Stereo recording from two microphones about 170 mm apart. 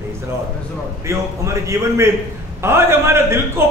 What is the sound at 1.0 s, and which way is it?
A man's voice, 15° right (ahead or behind).